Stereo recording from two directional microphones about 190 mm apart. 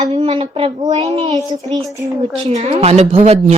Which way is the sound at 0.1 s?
35° right (ahead or behind).